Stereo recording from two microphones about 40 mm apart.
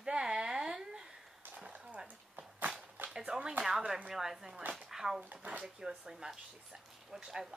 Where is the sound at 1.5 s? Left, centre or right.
Right.